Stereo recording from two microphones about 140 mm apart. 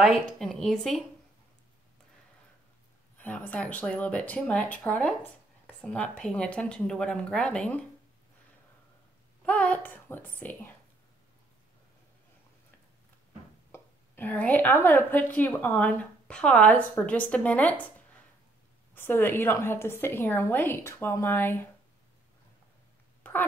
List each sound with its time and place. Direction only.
0.0 s a woman's voice: centre (ahead or behind)
3.2 s speech: 10° left (ahead or behind)
9.4 s speech: 10° left (ahead or behind)
13.7 s speech: 15° left (ahead or behind)
18.9 s speech: 15° left (ahead or behind)